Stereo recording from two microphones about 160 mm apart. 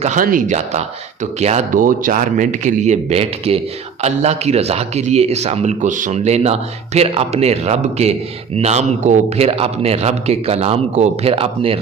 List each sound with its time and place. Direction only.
0.0 s speech: 55° right (ahead or behind)
1.8 s a man's voice: 60° right (ahead or behind); by 11.8 s 35° right (ahead or behind)